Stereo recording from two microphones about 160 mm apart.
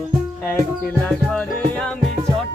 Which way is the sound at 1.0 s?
5° left (ahead or behind).